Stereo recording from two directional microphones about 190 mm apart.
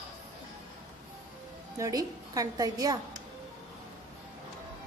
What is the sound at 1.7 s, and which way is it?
A woman's voice, 20° right (ahead or behind).